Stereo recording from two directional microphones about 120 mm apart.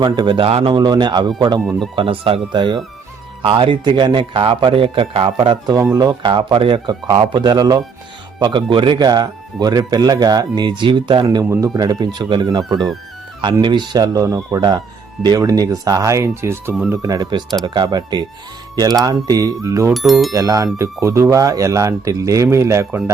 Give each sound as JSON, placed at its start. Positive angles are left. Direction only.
{"t": 0.0, "sound": "a man's voice", "side_deg": -40}
{"t": 0.7, "sound": "speech", "side_deg": -35}
{"t": 2.0, "sound": "a man's voice", "side_deg": -50}
{"t": 5.7, "sound": "speech", "side_deg": -25}
{"t": 6.3, "sound": "speech", "side_deg": -45}
{"t": 19.9, "sound": "speech", "side_deg": 0}
{"t": 20.3, "sound": "speech", "side_deg": -25}